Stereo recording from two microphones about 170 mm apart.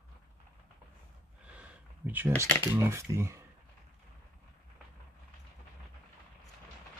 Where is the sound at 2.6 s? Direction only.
15° right (ahead or behind).